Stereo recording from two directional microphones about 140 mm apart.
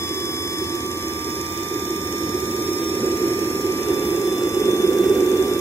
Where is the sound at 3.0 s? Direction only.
15° left (ahead or behind).